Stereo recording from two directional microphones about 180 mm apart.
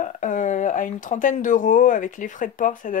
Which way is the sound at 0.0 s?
45° left (ahead or behind).